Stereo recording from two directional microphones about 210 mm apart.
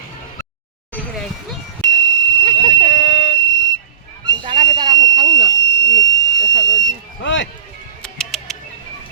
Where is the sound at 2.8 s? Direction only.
60° left (ahead or behind).